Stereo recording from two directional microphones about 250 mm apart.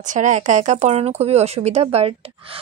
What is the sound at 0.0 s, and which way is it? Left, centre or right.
Speech, right.